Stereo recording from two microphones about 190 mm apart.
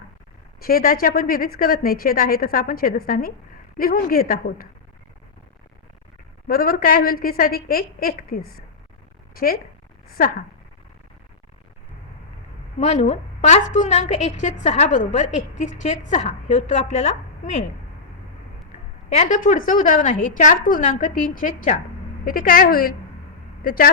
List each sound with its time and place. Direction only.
0.6 s a woman's voice: 50° left (ahead or behind)
6.5 s a woman's voice: 50° left (ahead or behind)
12.8 s a woman's voice: 40° left (ahead or behind)
19.1 s a woman's voice: 40° left (ahead or behind)